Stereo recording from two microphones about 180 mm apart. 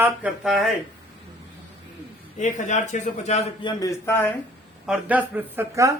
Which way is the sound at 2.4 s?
40° left (ahead or behind).